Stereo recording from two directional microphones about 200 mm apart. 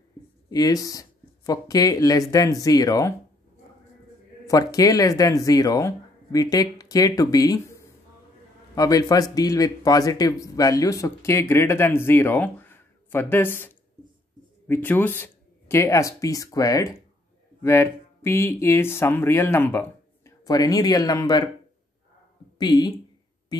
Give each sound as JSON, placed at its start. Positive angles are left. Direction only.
{"t": 0.5, "sound": "speech", "side_deg": 20}
{"t": 4.5, "sound": "speech", "side_deg": 15}
{"t": 14.7, "sound": "speech", "side_deg": 10}
{"t": 22.6, "sound": "speech", "side_deg": 20}